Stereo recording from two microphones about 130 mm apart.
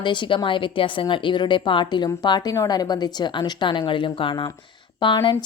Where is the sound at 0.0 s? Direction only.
40° left (ahead or behind).